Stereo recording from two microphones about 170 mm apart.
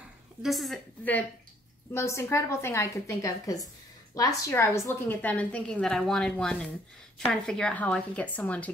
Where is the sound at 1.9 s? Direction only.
15° left (ahead or behind).